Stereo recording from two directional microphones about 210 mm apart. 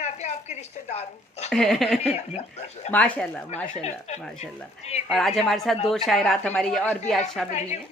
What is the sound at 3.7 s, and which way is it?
Speech, 30° left (ahead or behind).